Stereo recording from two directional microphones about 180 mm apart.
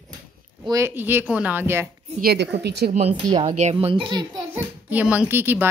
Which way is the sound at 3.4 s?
35° right (ahead or behind).